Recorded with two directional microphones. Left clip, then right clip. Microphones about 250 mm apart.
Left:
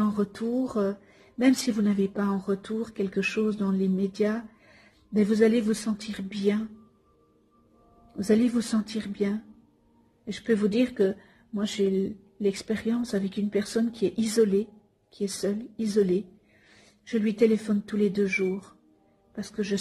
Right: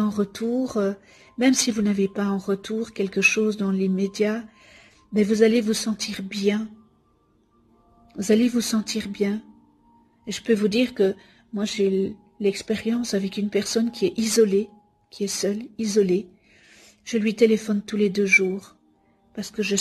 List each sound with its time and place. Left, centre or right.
0.0 s speech: right
8.1 s speech: right
10.4 s speech: right